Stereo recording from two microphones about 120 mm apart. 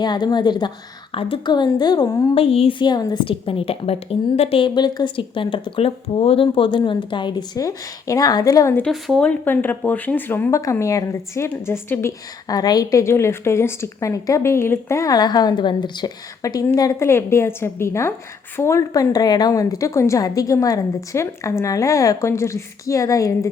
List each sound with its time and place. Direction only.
0.0 s speech: 35° left (ahead or behind)
1.1 s speech: 50° left (ahead or behind)
2.3 s a woman's voice: 55° left (ahead or behind); by 8.7 s 30° left (ahead or behind)
8.9 s speech: centre (ahead or behind); by 23.5 s 25° left (ahead or behind)